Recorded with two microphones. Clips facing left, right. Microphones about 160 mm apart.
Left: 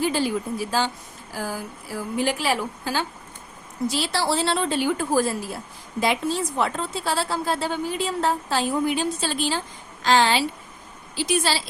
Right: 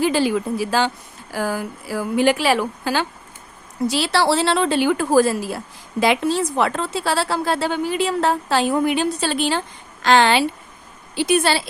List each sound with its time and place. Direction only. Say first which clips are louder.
0.0 s a woman's voice: right 5 dB; 90° right; by 11.7 s 60° right (ahead or behind)